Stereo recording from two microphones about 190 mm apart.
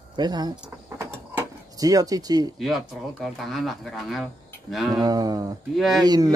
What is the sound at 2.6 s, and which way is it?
Speech, centre (ahead or behind).